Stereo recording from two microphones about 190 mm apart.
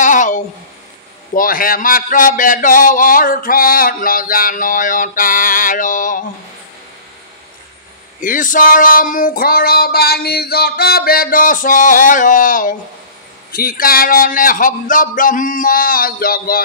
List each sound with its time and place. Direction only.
0.0 s a sound: 40° left (ahead or behind)
1.3 s speech: 45° left (ahead or behind)
8.2 s speech: 45° left (ahead or behind)